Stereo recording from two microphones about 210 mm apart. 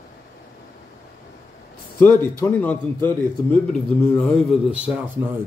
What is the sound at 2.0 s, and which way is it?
A man's voice, 10° left (ahead or behind).